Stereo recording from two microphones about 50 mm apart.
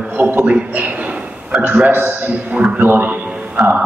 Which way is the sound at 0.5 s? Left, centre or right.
Right.